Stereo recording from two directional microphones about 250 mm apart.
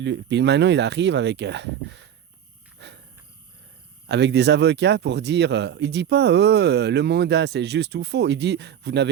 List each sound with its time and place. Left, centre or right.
0.0 s speech: right
2.8 s dog: right
4.0 s speech: right